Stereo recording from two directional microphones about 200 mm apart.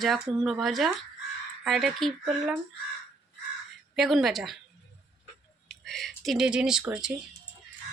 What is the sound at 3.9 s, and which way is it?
Speech, centre (ahead or behind).